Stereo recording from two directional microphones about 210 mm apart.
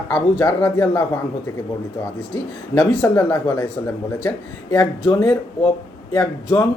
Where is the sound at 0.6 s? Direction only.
10° left (ahead or behind).